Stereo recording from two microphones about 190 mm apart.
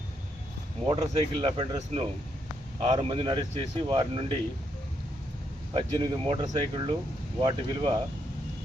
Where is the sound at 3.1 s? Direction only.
25° right (ahead or behind).